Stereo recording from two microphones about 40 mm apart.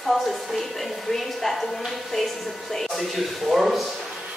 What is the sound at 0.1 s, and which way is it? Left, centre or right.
A woman's voice, centre.